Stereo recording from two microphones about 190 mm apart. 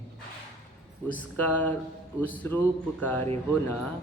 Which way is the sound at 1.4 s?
10° left (ahead or behind).